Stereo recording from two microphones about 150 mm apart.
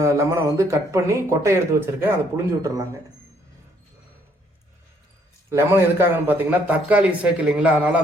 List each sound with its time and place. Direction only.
0.0 s speech: 20° right (ahead or behind)
5.5 s a man's voice: 15° right (ahead or behind)